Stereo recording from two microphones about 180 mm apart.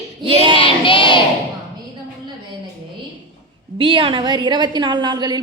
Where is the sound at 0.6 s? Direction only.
30° left (ahead or behind).